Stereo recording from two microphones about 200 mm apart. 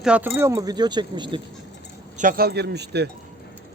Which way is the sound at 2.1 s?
45° right (ahead or behind).